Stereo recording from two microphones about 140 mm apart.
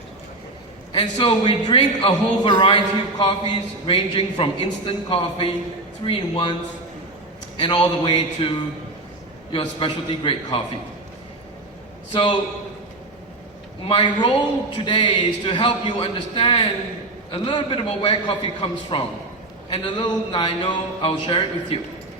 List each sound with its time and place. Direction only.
0.9 s a man's voice: 35° left (ahead or behind)
7.5 s a man's voice: 35° left (ahead or behind)
12.1 s a man's voice: 35° left (ahead or behind)
13.8 s a man's voice: 35° left (ahead or behind)